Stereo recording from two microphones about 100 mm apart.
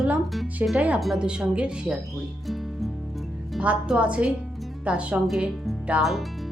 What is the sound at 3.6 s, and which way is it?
Speech, 10° right (ahead or behind).